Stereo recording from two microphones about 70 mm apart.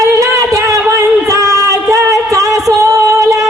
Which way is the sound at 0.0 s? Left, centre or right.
Right.